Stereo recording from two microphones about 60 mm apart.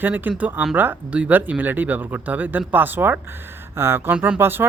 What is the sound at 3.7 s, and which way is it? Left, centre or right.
Speech, right.